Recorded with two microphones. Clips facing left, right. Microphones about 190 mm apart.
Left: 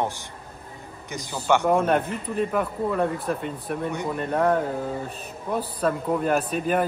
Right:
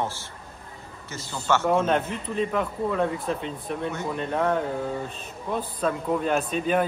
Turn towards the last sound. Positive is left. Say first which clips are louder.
# left 1 dB
turn(degrees=5)  # may be behind; listen again after turning